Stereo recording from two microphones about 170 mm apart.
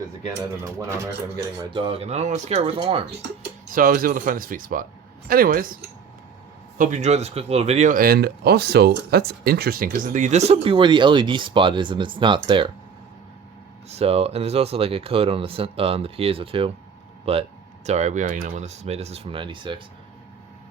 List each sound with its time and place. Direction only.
0.6 s speech: 15° right (ahead or behind)
1.7 s speech: 35° right (ahead or behind)
3.7 s speech: 55° right (ahead or behind); by 12.7 s 30° right (ahead or behind)
13.9 s speech: 35° right (ahead or behind)